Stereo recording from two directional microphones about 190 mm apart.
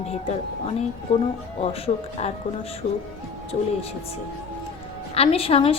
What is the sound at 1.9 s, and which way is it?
Speech, 30° left (ahead or behind).